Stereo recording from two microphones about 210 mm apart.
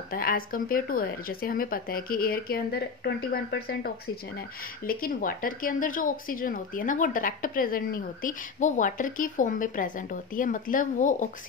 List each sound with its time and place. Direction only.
0.1 s speech: 45° left (ahead or behind)